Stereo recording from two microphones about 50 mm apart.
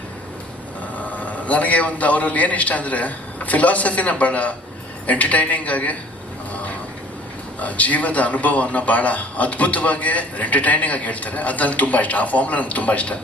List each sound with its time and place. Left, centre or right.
0.9 s a man's voice: left
7.6 s a man's voice: left